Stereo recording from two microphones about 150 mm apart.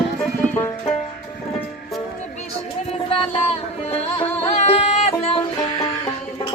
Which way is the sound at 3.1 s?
40° left (ahead or behind).